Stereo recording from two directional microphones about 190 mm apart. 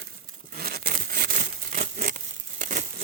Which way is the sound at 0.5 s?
55° right (ahead or behind).